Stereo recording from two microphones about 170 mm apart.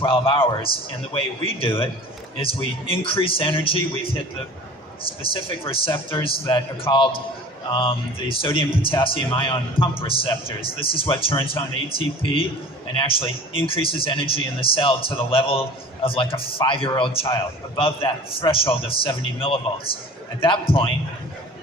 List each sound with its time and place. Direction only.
0.0 s speech: 30° left (ahead or behind)
5.2 s a man's voice: 30° left (ahead or behind)